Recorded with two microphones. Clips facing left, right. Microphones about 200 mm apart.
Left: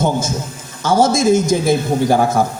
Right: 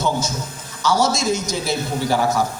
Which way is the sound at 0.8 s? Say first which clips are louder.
Left 5 dB; 50° left (ahead or behind).